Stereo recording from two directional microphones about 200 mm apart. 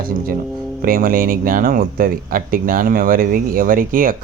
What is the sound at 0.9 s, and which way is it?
Speech, 45° right (ahead or behind).